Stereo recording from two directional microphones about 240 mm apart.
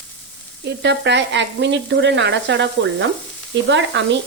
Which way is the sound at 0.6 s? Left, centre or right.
Right.